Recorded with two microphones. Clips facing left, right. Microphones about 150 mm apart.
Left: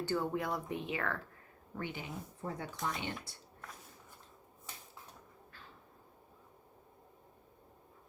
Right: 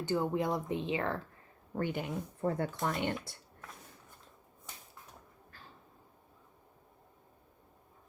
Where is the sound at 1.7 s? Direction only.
50° right (ahead or behind).